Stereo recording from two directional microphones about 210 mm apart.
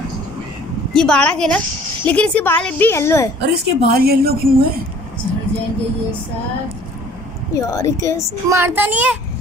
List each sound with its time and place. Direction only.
0.9 s a woman's voice: 5° left (ahead or behind)
3.4 s a woman's voice: 50° right (ahead or behind)
7.5 s a woman's voice: 15° left (ahead or behind)
8.5 s a child's voice: 10° right (ahead or behind)